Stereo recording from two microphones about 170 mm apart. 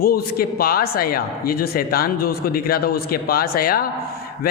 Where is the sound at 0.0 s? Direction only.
60° left (ahead or behind).